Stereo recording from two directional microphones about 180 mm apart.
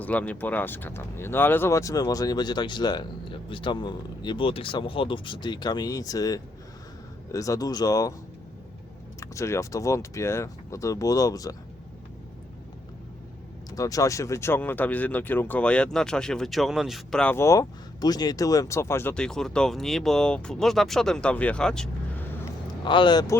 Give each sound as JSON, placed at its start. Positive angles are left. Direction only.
{"t": 0.0, "sound": "speech", "side_deg": 10}
{"t": 9.2, "sound": "speech", "side_deg": 15}
{"t": 13.7, "sound": "speech", "side_deg": 20}
{"t": 22.8, "sound": "speech", "side_deg": 25}